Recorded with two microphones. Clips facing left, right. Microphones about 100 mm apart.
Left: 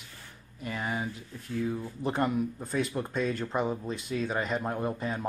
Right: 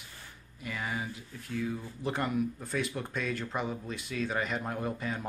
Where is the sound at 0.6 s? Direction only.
30° left (ahead or behind).